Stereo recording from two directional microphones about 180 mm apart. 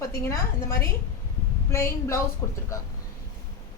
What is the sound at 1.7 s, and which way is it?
Speech, 15° left (ahead or behind).